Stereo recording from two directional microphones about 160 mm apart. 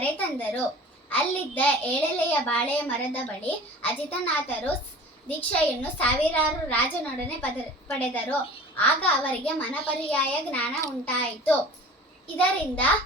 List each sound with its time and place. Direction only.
0.0 s a child's voice: 10° left (ahead or behind)